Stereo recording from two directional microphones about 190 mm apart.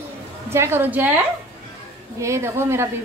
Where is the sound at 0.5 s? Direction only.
15° right (ahead or behind).